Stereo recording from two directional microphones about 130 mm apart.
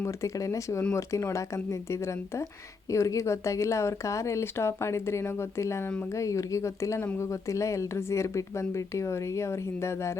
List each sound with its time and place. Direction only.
0.0 s speech: 25° left (ahead or behind)